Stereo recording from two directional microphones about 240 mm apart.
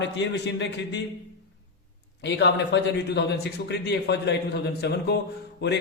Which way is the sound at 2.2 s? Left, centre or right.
Left.